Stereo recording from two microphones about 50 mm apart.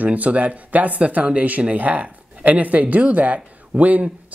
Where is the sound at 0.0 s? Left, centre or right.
Right.